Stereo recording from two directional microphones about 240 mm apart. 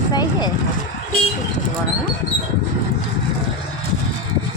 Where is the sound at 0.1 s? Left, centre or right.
Centre.